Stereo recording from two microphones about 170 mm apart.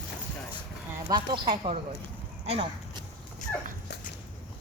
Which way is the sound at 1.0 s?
30° right (ahead or behind).